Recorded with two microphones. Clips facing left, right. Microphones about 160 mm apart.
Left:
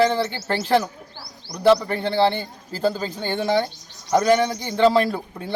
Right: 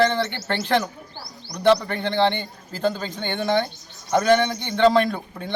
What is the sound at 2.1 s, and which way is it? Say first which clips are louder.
Speech: left 1 dB; 35° left (ahead or behind).